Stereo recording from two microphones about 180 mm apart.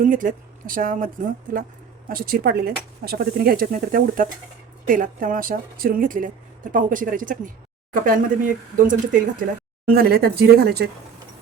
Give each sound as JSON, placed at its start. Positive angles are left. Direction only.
{"t": 0.0, "sound": "a woman's voice", "side_deg": -50}
{"t": 9.9, "sound": "speech", "side_deg": -60}